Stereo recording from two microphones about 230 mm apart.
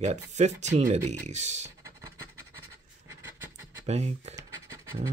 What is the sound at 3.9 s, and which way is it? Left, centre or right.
Speech, right.